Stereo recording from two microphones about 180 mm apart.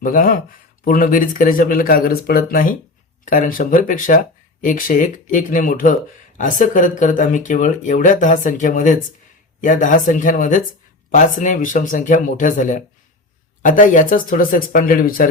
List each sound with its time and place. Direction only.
0.0 s speech: 50° left (ahead or behind)